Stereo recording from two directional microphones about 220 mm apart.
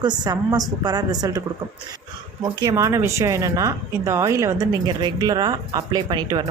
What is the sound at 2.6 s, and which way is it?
Speech, 15° right (ahead or behind).